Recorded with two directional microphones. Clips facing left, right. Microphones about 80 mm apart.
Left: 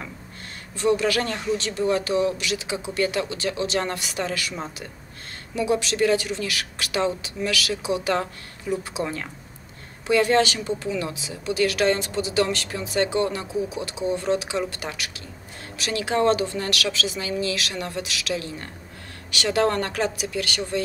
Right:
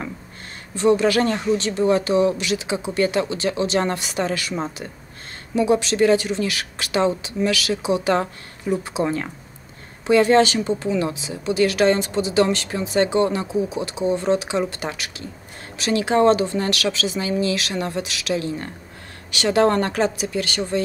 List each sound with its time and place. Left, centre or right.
0.7 s speech: right